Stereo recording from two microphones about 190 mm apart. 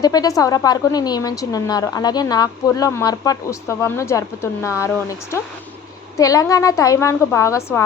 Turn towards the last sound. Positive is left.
turn(degrees=15)  # may be behind; listen again after turning